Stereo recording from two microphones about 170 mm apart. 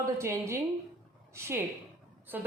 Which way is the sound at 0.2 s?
15° right (ahead or behind).